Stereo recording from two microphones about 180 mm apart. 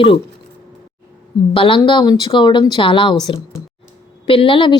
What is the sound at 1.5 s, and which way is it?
A woman's voice, 30° left (ahead or behind).